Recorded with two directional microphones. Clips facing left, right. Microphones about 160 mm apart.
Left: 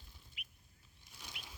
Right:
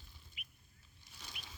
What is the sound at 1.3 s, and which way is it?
Bird, 75° left (ahead or behind).